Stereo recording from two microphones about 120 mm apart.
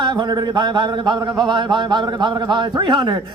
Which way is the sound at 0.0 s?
40° right (ahead or behind).